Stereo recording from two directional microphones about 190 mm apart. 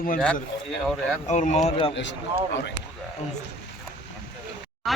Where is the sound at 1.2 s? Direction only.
40° left (ahead or behind).